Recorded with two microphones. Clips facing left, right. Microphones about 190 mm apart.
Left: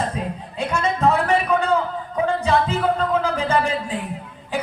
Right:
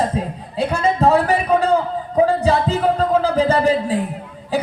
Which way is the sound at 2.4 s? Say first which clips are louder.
Right 3 dB; 35° right (ahead or behind).